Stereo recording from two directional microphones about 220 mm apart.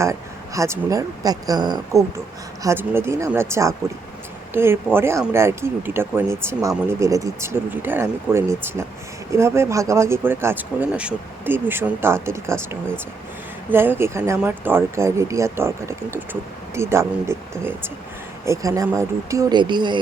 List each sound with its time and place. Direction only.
0.0 s speech: 15° right (ahead or behind)
13.7 s speech: 10° right (ahead or behind)